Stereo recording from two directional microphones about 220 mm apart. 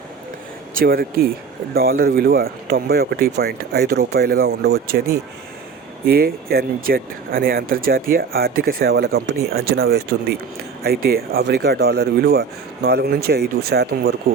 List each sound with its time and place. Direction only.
0.8 s speech: 40° right (ahead or behind)
6.1 s speech: 45° right (ahead or behind)